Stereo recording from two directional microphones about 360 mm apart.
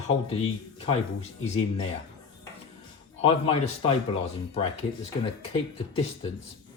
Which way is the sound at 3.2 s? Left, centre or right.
Centre.